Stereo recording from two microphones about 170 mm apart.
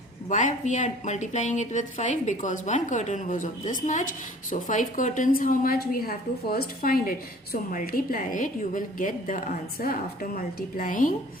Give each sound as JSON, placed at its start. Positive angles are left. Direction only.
{"t": 0.3, "sound": "a woman's voice", "side_deg": 45}